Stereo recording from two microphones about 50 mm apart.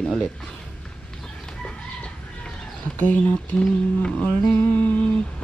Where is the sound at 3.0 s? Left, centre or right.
Left.